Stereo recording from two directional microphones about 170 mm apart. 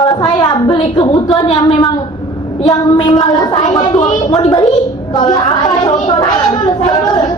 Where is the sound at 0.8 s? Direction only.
30° left (ahead or behind).